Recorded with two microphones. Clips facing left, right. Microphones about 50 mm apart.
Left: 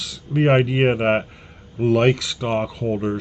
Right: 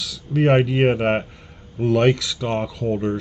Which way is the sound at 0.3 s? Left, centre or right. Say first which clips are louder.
Even; centre.